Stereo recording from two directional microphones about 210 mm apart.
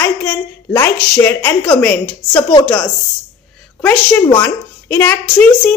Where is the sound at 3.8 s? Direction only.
5° left (ahead or behind).